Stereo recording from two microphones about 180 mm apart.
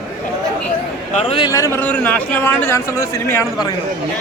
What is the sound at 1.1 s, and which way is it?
Speech, 35° left (ahead or behind).